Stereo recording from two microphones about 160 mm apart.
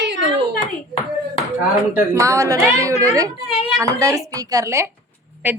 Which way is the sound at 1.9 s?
20° right (ahead or behind).